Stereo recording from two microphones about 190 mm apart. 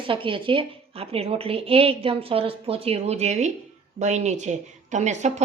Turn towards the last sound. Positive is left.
turn(degrees=-40)  # may be behind; listen again after turning